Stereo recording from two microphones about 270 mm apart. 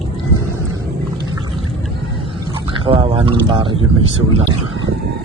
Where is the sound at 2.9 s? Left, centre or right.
Centre.